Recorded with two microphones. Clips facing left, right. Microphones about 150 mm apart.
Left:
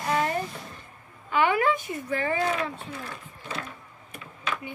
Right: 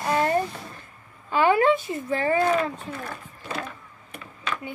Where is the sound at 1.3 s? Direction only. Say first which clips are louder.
Right 4 dB; 30° right (ahead or behind).